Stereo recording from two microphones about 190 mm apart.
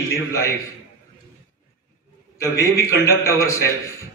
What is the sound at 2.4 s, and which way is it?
A man's voice, 15° left (ahead or behind).